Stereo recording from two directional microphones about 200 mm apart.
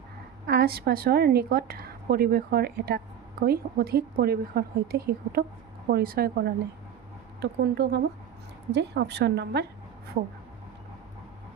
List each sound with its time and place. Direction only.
0.4 s a woman's voice: 50° right (ahead or behind)
7.6 s a woman's voice: 55° right (ahead or behind)